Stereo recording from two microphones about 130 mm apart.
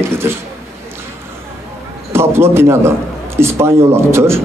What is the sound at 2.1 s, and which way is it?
A man's voice, 20° right (ahead or behind).